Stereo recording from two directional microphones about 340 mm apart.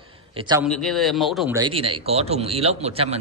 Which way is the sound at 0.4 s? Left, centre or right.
Centre.